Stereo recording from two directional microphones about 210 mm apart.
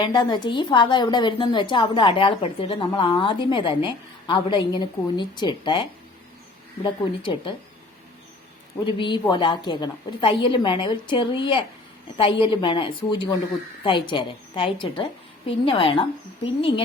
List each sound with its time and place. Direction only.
0.0 s a woman's voice: 20° left (ahead or behind)
7.2 s a woman's voice: 25° left (ahead or behind)
8.9 s a woman's voice: 25° left (ahead or behind)